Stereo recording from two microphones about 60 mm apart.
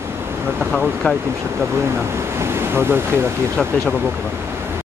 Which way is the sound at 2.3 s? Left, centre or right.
Right.